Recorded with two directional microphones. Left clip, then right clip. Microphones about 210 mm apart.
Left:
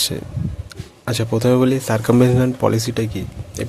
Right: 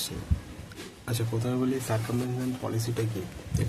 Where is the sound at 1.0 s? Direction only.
50° left (ahead or behind).